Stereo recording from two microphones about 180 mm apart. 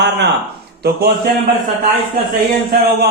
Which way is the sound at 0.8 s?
65° right (ahead or behind).